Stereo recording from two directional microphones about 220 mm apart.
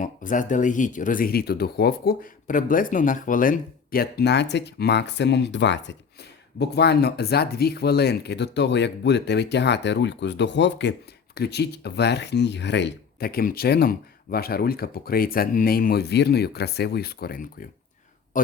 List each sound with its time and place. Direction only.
0.0 s speech: 35° left (ahead or behind)